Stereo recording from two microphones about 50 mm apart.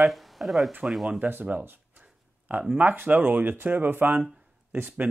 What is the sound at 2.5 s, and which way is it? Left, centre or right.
Speech, right.